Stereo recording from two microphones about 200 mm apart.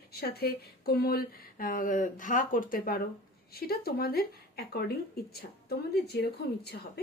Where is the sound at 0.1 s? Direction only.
50° left (ahead or behind).